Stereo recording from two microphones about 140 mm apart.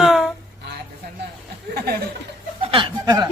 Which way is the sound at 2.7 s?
30° right (ahead or behind).